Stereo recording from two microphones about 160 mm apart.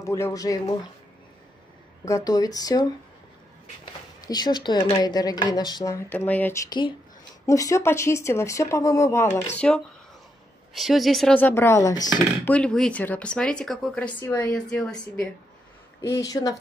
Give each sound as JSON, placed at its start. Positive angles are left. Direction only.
{"t": 0.0, "sound": "speech", "side_deg": 20}
{"t": 2.0, "sound": "speech", "side_deg": 20}
{"t": 6.0, "sound": "speech", "side_deg": 10}
{"t": 10.7, "sound": "speech", "side_deg": 0}
{"t": 11.3, "sound": "speech", "side_deg": 15}
{"t": 12.4, "sound": "speech", "side_deg": 5}
{"t": 16.0, "sound": "speech", "side_deg": 20}